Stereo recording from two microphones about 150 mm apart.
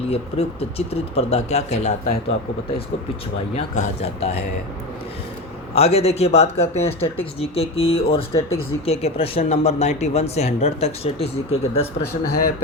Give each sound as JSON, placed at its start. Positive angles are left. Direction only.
{"t": 0.1, "sound": "speech", "side_deg": 40}
{"t": 3.5, "sound": "speech", "side_deg": 45}
{"t": 5.7, "sound": "speech", "side_deg": 45}